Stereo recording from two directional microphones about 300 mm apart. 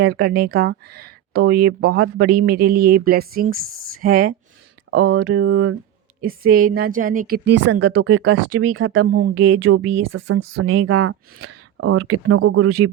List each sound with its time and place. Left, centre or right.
0.0 s a woman's voice: right
4.9 s speech: right
6.2 s a woman's voice: right